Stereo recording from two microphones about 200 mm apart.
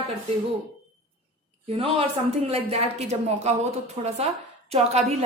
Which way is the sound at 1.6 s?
30° right (ahead or behind).